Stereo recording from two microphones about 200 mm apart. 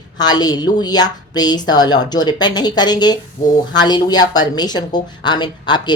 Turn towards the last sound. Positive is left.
turn(degrees=20)  # may be behind; listen again after turning